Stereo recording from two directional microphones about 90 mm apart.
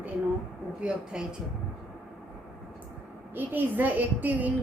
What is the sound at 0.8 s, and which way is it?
Speech, 10° right (ahead or behind).